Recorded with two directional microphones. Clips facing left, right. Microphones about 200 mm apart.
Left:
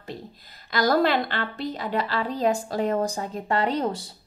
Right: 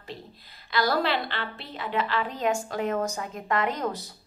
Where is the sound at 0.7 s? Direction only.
45° left (ahead or behind).